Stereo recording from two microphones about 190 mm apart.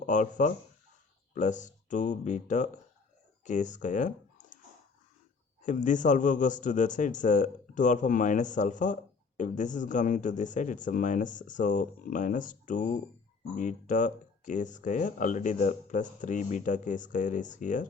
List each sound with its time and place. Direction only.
0.0 s speech: 40° left (ahead or behind)
5.6 s speech: 40° left (ahead or behind)